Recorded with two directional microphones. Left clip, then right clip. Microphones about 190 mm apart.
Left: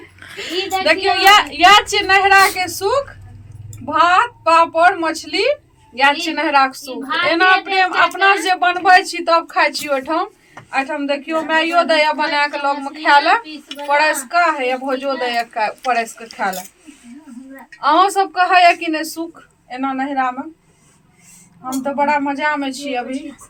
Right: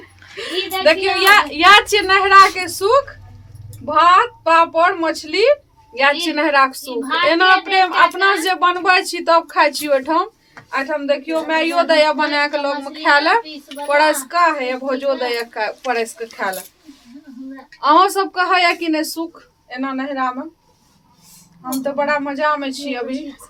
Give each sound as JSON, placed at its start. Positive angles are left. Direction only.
{"t": 0.3, "sound": "a woman's voice", "side_deg": -20}
{"t": 17.7, "sound": "a woman's voice", "side_deg": -15}
{"t": 21.8, "sound": "a woman's voice", "side_deg": -10}